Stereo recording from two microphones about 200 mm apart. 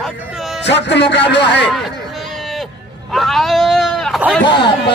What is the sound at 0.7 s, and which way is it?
Speech, 60° left (ahead or behind).